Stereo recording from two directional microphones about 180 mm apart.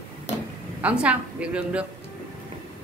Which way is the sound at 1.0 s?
5° right (ahead or behind).